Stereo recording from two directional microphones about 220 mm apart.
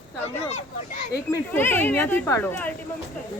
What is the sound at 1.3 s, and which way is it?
Speech, 10° left (ahead or behind).